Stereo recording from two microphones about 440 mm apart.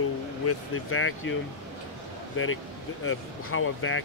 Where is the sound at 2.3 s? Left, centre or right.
Left.